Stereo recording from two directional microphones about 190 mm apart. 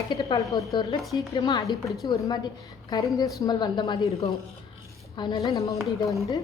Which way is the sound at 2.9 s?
15° left (ahead or behind).